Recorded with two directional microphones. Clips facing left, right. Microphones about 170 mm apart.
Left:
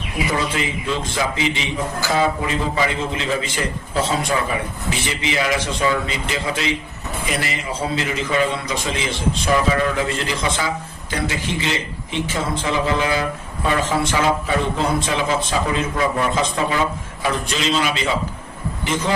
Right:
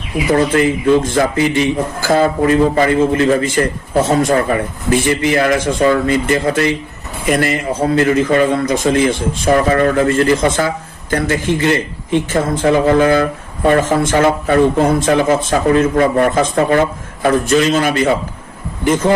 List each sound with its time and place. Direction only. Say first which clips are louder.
0.3 s a man's voice: right 12 dB; 55° right (ahead or behind)